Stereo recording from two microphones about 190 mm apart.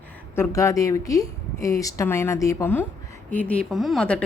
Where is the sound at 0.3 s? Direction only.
15° left (ahead or behind).